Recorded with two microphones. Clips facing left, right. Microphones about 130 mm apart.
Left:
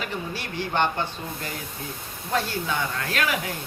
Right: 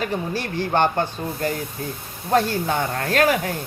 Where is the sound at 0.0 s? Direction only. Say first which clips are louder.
Right 6 dB; 45° right (ahead or behind).